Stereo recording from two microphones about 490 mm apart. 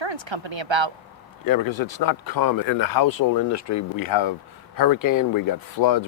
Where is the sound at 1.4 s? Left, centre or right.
Left.